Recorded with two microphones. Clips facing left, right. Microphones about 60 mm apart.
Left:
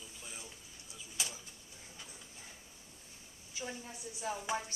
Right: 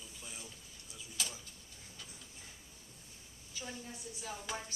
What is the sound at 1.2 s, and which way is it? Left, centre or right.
Speech, centre.